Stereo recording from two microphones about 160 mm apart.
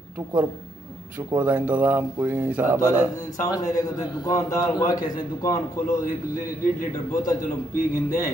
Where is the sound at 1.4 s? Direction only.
10° right (ahead or behind).